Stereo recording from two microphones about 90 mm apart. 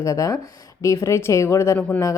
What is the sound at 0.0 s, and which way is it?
Speech, 35° left (ahead or behind).